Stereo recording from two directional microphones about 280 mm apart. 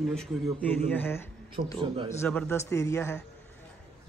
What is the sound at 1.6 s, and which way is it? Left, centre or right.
Speech, right.